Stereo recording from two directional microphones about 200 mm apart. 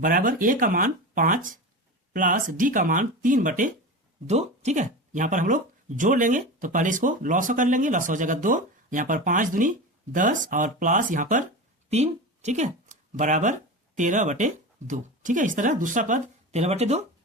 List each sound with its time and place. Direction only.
0.0 s speech: 45° right (ahead or behind)